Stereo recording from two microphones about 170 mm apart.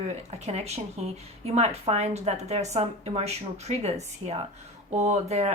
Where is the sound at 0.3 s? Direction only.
40° right (ahead or behind).